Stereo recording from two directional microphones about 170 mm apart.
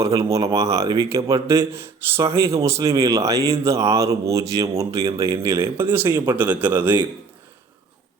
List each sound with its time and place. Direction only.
0.0 s speech: 20° right (ahead or behind)